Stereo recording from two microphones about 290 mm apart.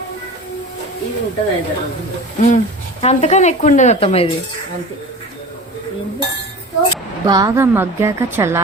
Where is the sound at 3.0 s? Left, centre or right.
Left.